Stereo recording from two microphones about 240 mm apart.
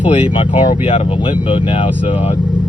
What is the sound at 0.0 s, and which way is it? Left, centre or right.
Speech, left.